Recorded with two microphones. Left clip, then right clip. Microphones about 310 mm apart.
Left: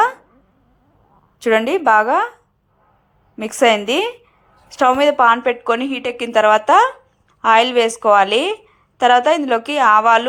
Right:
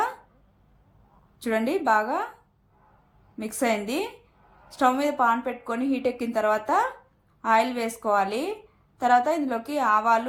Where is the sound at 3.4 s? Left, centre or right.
Left.